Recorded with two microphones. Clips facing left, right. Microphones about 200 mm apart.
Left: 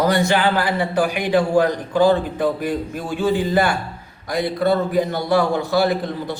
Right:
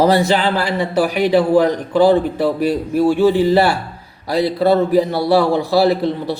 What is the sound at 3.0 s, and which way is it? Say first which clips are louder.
Speech: right 14 dB; 70° right (ahead or behind).